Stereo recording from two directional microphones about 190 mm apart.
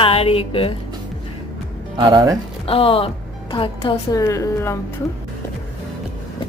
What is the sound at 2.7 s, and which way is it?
A woman's voice, 30° left (ahead or behind).